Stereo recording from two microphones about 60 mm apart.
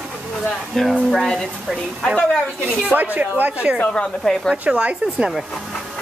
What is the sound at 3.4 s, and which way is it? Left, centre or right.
Speech, right.